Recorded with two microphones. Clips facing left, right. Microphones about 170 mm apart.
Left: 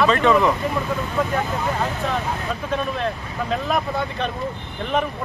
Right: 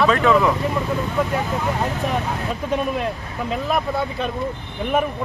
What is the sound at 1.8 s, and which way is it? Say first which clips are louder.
Speech: right 1 dB; 20° right (ahead or behind).